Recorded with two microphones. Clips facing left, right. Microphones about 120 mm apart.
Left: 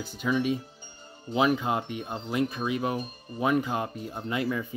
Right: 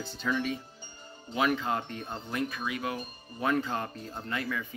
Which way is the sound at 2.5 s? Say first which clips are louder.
Left 5 dB; 25° left (ahead or behind).